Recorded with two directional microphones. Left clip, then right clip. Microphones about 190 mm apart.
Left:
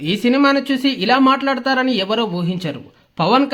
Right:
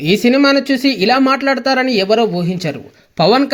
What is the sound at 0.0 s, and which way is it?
Speech, 20° right (ahead or behind).